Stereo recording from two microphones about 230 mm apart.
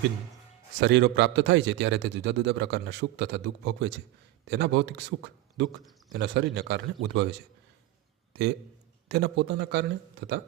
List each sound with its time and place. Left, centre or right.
0.8 s a man's voice: right
8.3 s a man's voice: right